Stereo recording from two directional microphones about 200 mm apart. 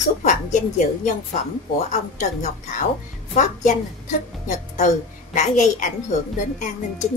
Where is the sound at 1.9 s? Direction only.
35° left (ahead or behind).